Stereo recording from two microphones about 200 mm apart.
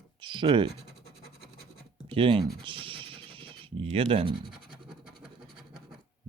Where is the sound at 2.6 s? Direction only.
25° right (ahead or behind).